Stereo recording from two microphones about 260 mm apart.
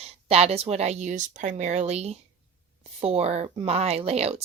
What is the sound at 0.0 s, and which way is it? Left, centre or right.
Speech, right.